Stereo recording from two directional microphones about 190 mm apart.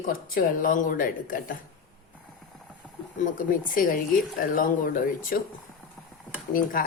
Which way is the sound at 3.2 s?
45° left (ahead or behind).